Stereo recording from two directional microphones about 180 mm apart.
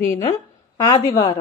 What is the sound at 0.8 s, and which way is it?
Speech, 20° left (ahead or behind).